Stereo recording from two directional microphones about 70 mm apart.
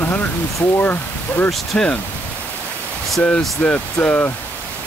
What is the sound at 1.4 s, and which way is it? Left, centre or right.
Speech, centre.